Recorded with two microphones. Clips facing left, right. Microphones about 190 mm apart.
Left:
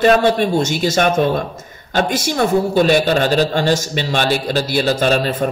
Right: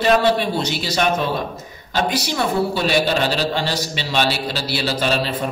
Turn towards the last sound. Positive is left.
turn(degrees=45)  # may be behind; listen again after turning